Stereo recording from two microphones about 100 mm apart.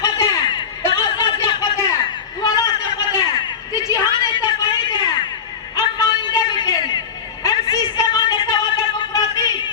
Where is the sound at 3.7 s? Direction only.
35° left (ahead or behind).